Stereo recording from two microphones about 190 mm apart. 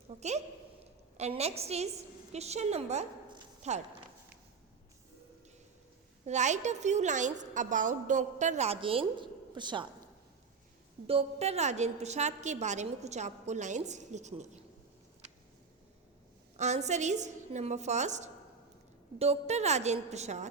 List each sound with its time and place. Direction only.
0.2 s a woman's voice: 35° right (ahead or behind)
6.2 s a woman's voice: 40° right (ahead or behind)
11.0 s a woman's voice: 30° right (ahead or behind)
16.6 s a woman's voice: 35° right (ahead or behind)